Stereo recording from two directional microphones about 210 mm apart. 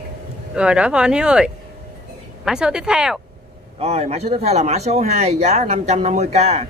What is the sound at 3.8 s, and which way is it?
Speech, 30° right (ahead or behind).